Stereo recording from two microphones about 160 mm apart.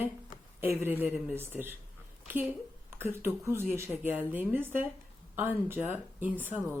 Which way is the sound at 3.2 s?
15° right (ahead or behind).